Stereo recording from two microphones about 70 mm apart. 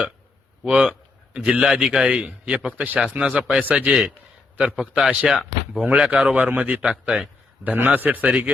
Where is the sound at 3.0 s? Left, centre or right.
Centre.